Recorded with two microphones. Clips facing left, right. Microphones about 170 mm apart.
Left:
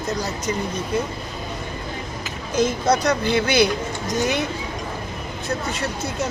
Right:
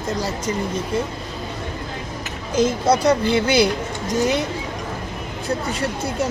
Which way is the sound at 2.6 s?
30° right (ahead or behind).